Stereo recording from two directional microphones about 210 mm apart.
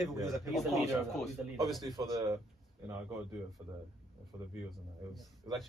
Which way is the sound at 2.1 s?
15° right (ahead or behind).